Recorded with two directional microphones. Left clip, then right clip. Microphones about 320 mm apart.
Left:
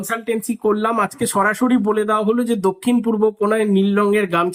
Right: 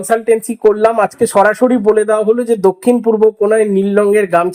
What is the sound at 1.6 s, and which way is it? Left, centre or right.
Speech, right.